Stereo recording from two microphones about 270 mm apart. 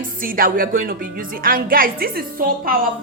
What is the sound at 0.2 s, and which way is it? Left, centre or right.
A woman's voice, right.